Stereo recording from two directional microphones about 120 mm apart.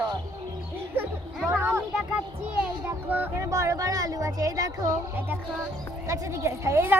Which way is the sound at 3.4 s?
25° right (ahead or behind).